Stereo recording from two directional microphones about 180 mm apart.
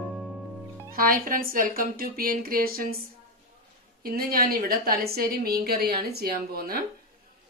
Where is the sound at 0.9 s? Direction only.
50° right (ahead or behind).